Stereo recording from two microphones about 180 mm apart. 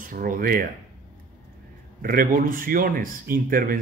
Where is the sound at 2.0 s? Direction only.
55° right (ahead or behind).